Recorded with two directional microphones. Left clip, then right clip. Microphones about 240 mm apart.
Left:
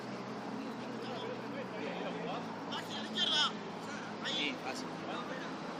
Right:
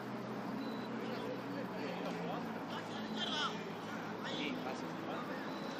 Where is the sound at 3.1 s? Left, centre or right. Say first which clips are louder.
Left 8 dB; left.